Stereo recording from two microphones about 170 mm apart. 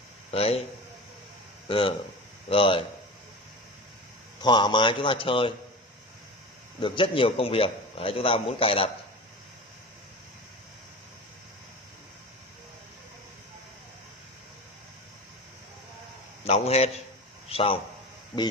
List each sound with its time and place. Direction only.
0.3 s a man's voice: 35° left (ahead or behind)
1.7 s a man's voice: 30° left (ahead or behind)
4.4 s speech: 25° left (ahead or behind)
6.8 s a man's voice: 30° left (ahead or behind)
16.4 s a man's voice: 35° left (ahead or behind)